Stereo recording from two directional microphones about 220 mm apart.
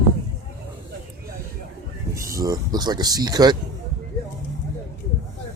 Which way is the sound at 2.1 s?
15° right (ahead or behind).